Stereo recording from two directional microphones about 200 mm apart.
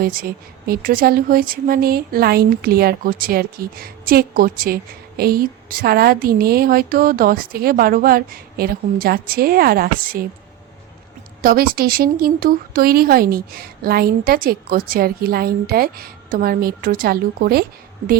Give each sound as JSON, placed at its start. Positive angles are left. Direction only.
{"t": 0.0, "sound": "a woman's voice", "side_deg": -45}
{"t": 11.4, "sound": "a woman's voice", "side_deg": -45}